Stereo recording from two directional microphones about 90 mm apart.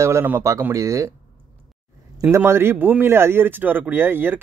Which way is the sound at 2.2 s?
30° right (ahead or behind).